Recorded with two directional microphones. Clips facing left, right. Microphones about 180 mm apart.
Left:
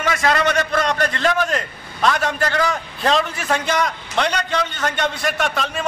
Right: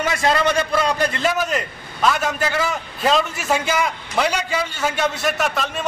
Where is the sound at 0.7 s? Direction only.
10° right (ahead or behind).